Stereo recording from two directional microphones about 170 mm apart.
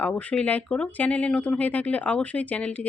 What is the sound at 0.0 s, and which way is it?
Speech, 10° left (ahead or behind).